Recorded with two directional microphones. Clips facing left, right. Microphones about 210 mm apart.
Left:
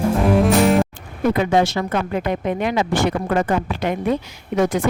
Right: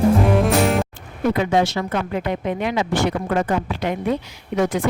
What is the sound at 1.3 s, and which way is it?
Speech, 45° left (ahead or behind).